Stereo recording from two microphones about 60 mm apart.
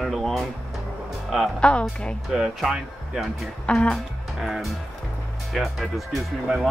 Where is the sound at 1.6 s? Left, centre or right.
Centre.